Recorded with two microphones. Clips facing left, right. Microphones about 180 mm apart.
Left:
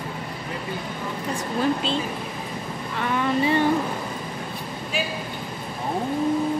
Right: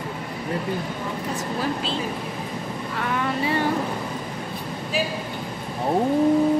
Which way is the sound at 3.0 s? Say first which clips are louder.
Left 3 dB; 5° right (ahead or behind).